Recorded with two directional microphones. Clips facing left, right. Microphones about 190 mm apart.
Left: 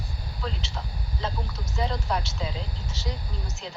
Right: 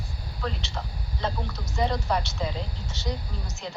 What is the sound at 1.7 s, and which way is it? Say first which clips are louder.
Speech: right 3 dB; centre (ahead or behind).